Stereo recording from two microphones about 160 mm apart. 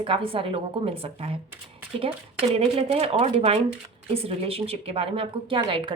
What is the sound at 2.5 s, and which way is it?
Speech, 35° right (ahead or behind).